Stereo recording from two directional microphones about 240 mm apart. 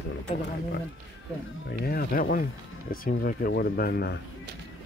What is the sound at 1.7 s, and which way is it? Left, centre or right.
Speech, left.